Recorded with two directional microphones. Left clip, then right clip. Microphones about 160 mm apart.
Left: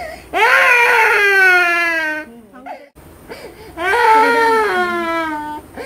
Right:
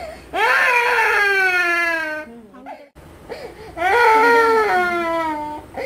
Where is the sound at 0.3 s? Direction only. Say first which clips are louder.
Left 5 dB; 40° left (ahead or behind).